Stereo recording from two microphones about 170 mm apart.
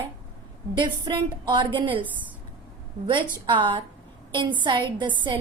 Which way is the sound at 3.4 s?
30° right (ahead or behind).